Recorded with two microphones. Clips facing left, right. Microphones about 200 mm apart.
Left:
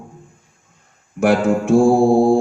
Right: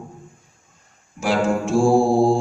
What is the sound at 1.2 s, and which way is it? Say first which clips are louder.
Mantra: left 5 dB; 55° left (ahead or behind).